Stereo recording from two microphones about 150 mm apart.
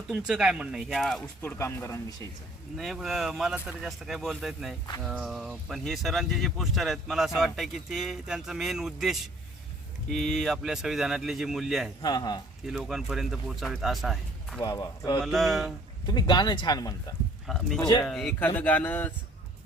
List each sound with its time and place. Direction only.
0.1 s speech: 5° right (ahead or behind)
1.4 s speech: 20° left (ahead or behind)
2.7 s speech: centre (ahead or behind)
12.0 s speech: 25° left (ahead or behind)
12.6 s speech: 5° right (ahead or behind)
14.6 s speech: 25° left (ahead or behind)
15.2 s speech: centre (ahead or behind)
16.0 s speech: 30° left (ahead or behind)
17.4 s speech: centre (ahead or behind)
17.7 s speech: 25° left (ahead or behind)
18.0 s speech: centre (ahead or behind)